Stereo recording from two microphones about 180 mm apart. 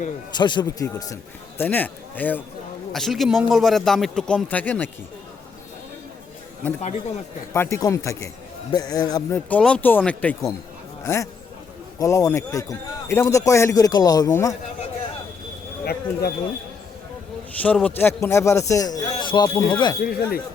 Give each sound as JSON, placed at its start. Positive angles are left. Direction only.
{"t": 0.3, "sound": "a man's voice", "side_deg": 25}
{"t": 7.5, "sound": "a man's voice", "side_deg": 15}
{"t": 9.5, "sound": "a man's voice", "side_deg": 5}
{"t": 15.8, "sound": "speech", "side_deg": 60}
{"t": 17.6, "sound": "a man's voice", "side_deg": 10}
{"t": 20.0, "sound": "speech", "side_deg": 55}